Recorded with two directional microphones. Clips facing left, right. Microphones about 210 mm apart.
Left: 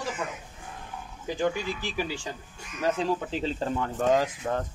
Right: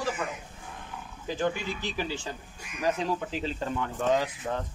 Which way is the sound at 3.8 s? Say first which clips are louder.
Left 2 dB; 45° left (ahead or behind).